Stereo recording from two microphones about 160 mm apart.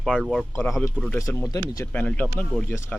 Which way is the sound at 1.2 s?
20° left (ahead or behind).